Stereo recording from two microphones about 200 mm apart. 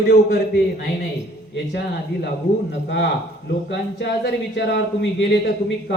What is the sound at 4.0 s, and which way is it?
Speech, 60° left (ahead or behind).